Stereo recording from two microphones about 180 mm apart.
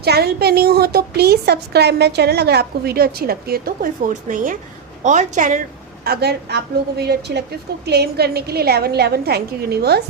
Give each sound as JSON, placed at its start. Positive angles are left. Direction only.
{"t": 0.0, "sound": "a woman's voice", "side_deg": -60}
{"t": 4.1, "sound": "a woman's voice", "side_deg": -45}
{"t": 6.1, "sound": "a woman's voice", "side_deg": -65}